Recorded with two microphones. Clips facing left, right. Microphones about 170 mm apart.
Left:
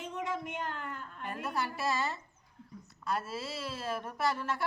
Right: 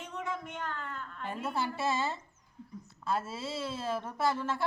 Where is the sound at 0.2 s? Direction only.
10° left (ahead or behind).